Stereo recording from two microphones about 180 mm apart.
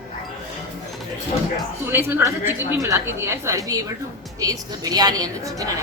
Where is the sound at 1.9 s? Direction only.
10° right (ahead or behind).